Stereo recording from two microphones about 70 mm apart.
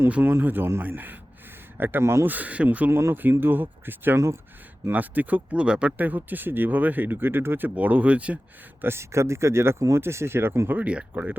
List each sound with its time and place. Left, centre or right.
0.1 s speech: right
2.3 s speech: right
2.9 s speech: right
8.8 s speech: right
10.8 s speech: right